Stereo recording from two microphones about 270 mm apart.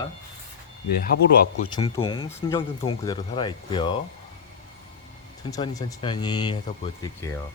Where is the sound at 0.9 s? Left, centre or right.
Left.